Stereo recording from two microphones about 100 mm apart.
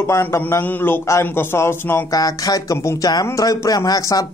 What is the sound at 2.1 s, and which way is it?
Speech, 40° left (ahead or behind).